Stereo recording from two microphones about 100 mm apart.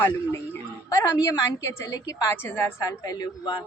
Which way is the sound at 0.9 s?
35° left (ahead or behind).